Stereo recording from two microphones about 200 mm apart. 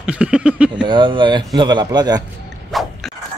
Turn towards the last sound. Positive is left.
turn(degrees=0)  # may be behind; listen again after turning